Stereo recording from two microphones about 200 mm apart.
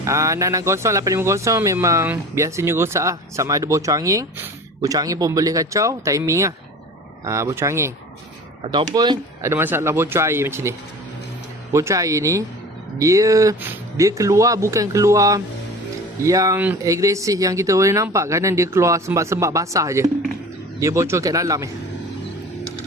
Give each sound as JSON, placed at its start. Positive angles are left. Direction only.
{"t": 0.0, "sound": "speech", "side_deg": -15}